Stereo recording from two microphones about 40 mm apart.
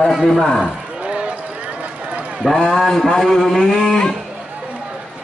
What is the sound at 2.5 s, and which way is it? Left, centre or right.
Speech, centre.